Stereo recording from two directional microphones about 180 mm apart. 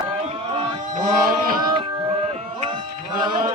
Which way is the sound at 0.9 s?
45° right (ahead or behind).